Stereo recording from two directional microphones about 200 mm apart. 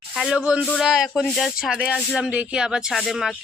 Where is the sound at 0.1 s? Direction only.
Centre (ahead or behind).